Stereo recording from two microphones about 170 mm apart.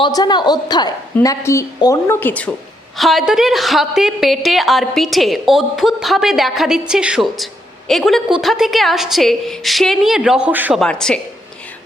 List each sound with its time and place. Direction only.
0.0 s a woman's voice: 25° left (ahead or behind); by 10.8 s 10° right (ahead or behind)
10.8 s a woman's voice: 5° left (ahead or behind)